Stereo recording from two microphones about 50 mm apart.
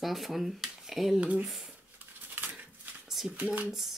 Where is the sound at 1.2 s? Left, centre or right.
Right.